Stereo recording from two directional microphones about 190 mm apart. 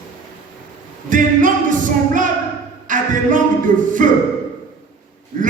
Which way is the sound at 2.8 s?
45° right (ahead or behind).